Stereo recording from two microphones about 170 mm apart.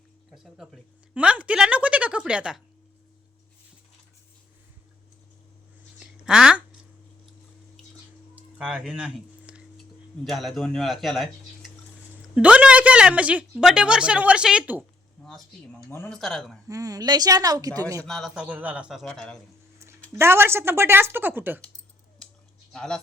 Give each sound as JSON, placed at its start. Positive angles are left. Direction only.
{"t": 0.3, "sound": "a woman's voice", "side_deg": 0}
{"t": 6.2, "sound": "speech", "side_deg": -5}
{"t": 8.4, "sound": "a sound", "side_deg": -5}
{"t": 10.2, "sound": "a man's voice", "side_deg": 0}
{"t": 12.3, "sound": "a woman's voice", "side_deg": -5}
{"t": 15.9, "sound": "speech", "side_deg": 10}
{"t": 16.1, "sound": "a man's voice", "side_deg": 0}
{"t": 16.6, "sound": "a woman's voice", "side_deg": -20}
{"t": 18.0, "sound": "a man's voice", "side_deg": 0}
{"t": 20.1, "sound": "speech", "side_deg": -15}
{"t": 22.7, "sound": "speech", "side_deg": 5}